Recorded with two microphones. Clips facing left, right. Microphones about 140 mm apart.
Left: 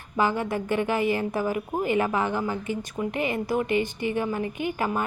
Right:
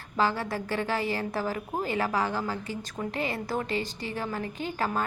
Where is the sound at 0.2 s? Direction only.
20° left (ahead or behind).